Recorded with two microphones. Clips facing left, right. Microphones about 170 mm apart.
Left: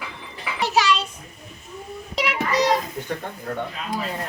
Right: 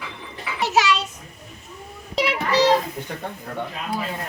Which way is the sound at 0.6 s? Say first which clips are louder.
Even; centre (ahead or behind).